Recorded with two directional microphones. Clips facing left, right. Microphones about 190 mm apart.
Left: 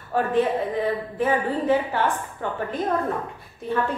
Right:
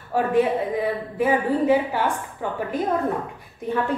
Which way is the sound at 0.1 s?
10° right (ahead or behind).